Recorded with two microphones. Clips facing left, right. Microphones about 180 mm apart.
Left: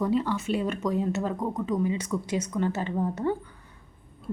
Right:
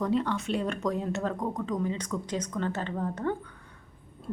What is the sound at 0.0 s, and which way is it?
A woman's voice, 5° left (ahead or behind).